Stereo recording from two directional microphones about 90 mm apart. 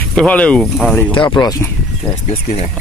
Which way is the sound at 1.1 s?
65° left (ahead or behind).